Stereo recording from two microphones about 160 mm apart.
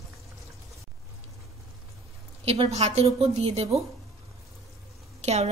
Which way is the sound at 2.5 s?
40° right (ahead or behind).